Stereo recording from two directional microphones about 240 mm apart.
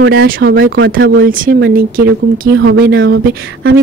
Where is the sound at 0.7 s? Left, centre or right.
Right.